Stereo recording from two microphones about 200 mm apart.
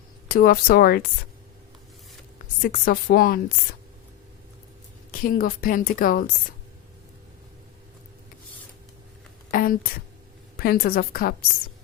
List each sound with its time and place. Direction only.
0.3 s a woman's voice: 45° left (ahead or behind)
2.6 s a woman's voice: 45° left (ahead or behind)
5.2 s a woman's voice: 45° left (ahead or behind)
9.5 s a woman's voice: 45° left (ahead or behind)